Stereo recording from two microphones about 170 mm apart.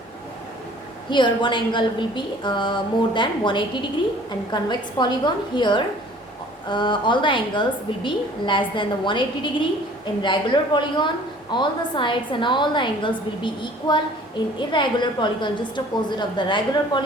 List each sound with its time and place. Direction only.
1.1 s a woman's voice: 30° left (ahead or behind)